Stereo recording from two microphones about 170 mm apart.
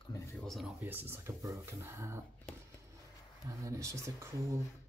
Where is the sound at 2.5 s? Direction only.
5° left (ahead or behind).